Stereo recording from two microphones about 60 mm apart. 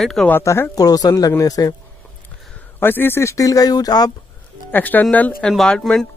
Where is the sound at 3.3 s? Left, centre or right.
Left.